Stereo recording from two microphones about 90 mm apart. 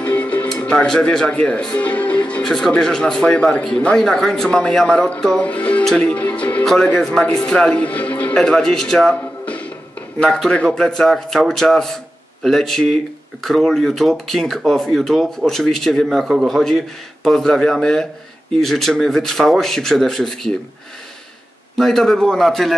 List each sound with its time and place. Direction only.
0.0 s music: 15° left (ahead or behind)
0.5 s speech: 10° left (ahead or behind)
6.6 s a man's voice: 5° left (ahead or behind)
21.7 s a man's voice: 5° left (ahead or behind)